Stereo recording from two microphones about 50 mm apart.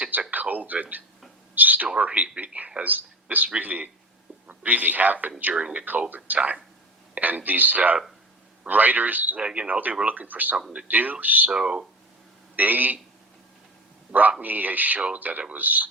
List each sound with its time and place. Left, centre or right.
0.1 s a sound: right
2.0 s a man's voice: right
2.8 s a man's voice: right
5.5 s a man's voice: centre
5.8 s speech: right
9.4 s a man's voice: right
11.5 s speech: centre
12.5 s speech: right
14.1 s speech: right